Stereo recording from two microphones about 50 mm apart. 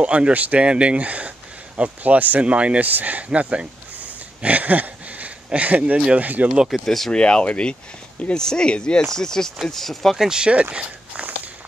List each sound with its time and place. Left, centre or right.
0.0 s speech: right
3.3 s speech: right
4.4 s a sound: right
6.1 s speech: right
6.7 s speech: centre
7.1 s speech: left
10.1 s speech: centre